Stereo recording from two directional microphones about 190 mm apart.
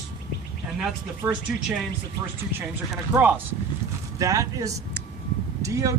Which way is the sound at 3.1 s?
10° right (ahead or behind).